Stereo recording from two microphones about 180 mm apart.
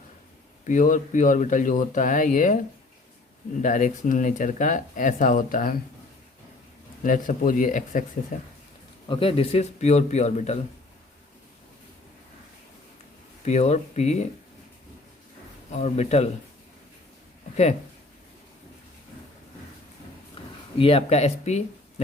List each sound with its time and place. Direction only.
0.6 s speech: 45° left (ahead or behind)
3.6 s speech: 45° left (ahead or behind)
7.0 s speech: 50° left (ahead or behind)
9.0 s speech: 30° left (ahead or behind)
13.4 s speech: 40° left (ahead or behind)
15.7 s speech: 40° left (ahead or behind)
20.7 s speech: 35° left (ahead or behind)